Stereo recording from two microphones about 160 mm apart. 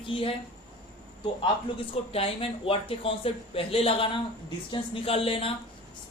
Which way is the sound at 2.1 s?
35° left (ahead or behind).